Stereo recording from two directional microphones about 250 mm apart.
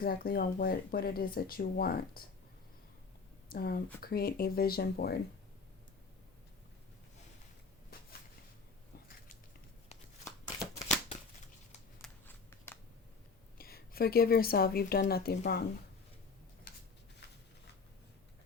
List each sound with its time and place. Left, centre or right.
0.0 s speech: left
3.5 s speech: left
9.9 s a sound: left
12.0 s shuffling cards: centre
13.6 s speech: left
16.7 s a sound: left